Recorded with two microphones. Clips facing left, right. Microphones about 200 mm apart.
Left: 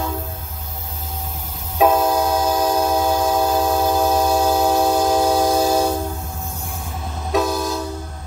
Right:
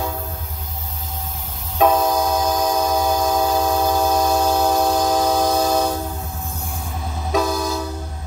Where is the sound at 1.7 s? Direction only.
5° left (ahead or behind).